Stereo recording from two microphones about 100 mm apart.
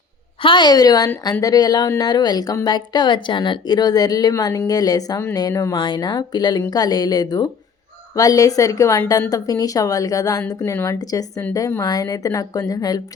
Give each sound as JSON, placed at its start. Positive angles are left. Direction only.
{"t": 0.4, "sound": "speech", "side_deg": 50}